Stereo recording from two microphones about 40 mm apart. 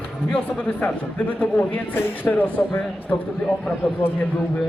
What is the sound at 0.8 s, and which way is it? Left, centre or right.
A man's voice, left.